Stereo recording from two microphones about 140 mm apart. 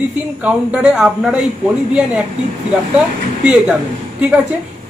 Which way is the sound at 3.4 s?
5° right (ahead or behind).